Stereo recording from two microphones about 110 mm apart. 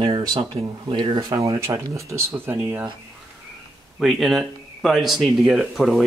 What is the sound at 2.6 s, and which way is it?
Speech, 15° right (ahead or behind).